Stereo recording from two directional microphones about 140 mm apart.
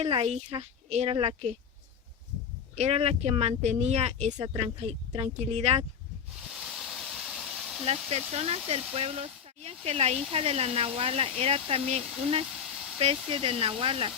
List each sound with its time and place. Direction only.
0.0 s speech: 50° right (ahead or behind)
2.7 s speech: 50° right (ahead or behind)
4.4 s speech: 40° right (ahead or behind)
5.2 s speech: 50° right (ahead or behind)
6.7 s a sound: centre (ahead or behind)
7.9 s speech: 45° right (ahead or behind)